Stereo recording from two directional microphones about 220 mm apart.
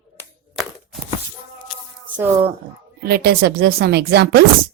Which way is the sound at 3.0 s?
45° right (ahead or behind).